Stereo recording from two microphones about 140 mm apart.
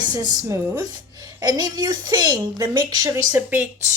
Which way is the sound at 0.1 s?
30° right (ahead or behind).